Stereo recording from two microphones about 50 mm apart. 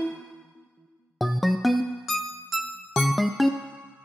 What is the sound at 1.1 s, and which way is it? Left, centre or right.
Music, centre.